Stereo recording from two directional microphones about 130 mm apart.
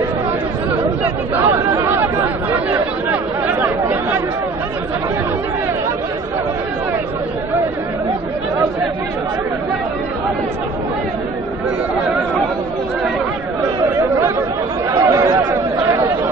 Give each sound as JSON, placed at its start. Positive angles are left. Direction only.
{"t": 1.0, "sound": "chatter", "side_deg": -15}
{"t": 14.9, "sound": "chatter", "side_deg": -25}